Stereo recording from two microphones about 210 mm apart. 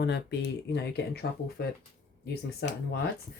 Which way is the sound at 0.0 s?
55° left (ahead or behind).